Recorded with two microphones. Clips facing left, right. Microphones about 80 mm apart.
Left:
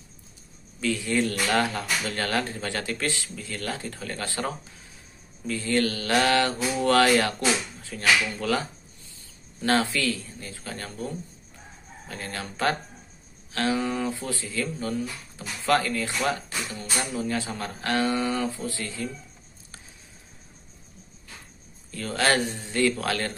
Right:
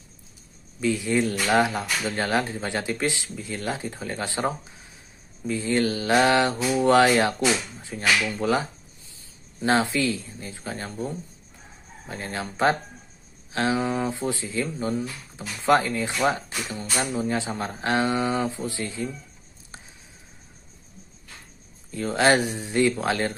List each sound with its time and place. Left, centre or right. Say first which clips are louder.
0.7 s speech: right 2 dB; centre
21.9 s speech: right 4 dB; centre